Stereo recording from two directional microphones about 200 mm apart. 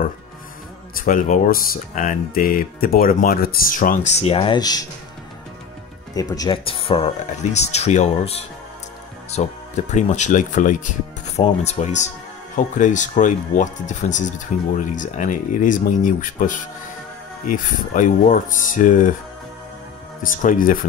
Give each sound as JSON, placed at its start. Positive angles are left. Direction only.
{"t": 1.0, "sound": "speech", "side_deg": 40}
{"t": 6.1, "sound": "speech", "side_deg": 20}
{"t": 17.9, "sound": "speech", "side_deg": 40}
{"t": 20.2, "sound": "speech", "side_deg": 40}